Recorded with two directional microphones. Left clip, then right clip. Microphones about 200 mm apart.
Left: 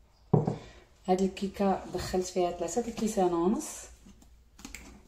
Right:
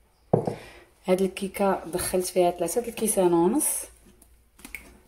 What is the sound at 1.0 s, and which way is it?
A woman's voice, 55° right (ahead or behind).